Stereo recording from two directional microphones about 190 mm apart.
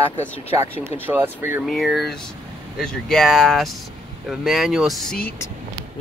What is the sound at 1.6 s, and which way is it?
Speech, centre (ahead or behind).